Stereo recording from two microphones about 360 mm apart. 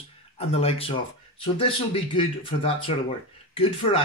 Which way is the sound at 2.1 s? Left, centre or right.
Centre.